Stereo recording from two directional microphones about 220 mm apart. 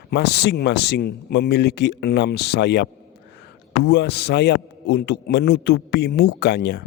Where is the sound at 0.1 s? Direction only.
50° left (ahead or behind).